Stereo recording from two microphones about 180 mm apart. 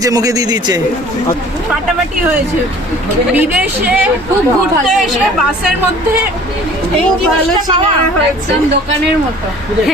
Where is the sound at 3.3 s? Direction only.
10° right (ahead or behind).